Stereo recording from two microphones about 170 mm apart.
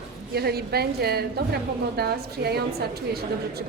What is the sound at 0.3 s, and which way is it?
A woman's voice, 65° right (ahead or behind).